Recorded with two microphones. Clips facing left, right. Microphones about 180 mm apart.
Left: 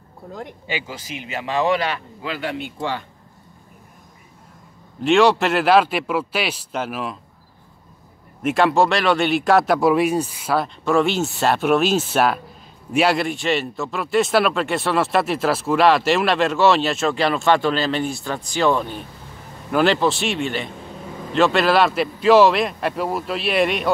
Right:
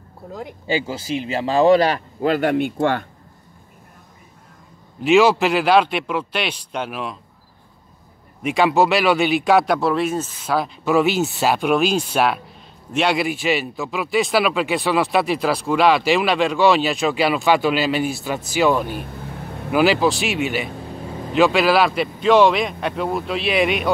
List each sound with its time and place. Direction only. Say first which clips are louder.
0.3 s a man's voice: right 1 dB; centre (ahead or behind)
0.7 s speech: right 9 dB; 30° right (ahead or behind); by 3.1 s 55° right (ahead or behind)
5.0 s a man's voice: right 1 dB; centre (ahead or behind)
8.4 s a man's voice: even; centre (ahead or behind)
9.8 s speech: left 3 dB; 15° left (ahead or behind)
10.5 s a man's voice: right 1 dB; centre (ahead or behind)